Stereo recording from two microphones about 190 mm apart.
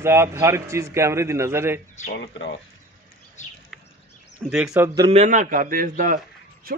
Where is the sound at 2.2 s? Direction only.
75° left (ahead or behind).